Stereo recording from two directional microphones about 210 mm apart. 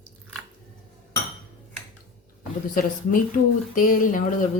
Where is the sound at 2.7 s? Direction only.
40° left (ahead or behind).